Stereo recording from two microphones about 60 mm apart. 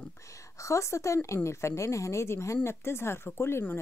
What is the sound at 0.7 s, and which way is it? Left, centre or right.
Speech, left.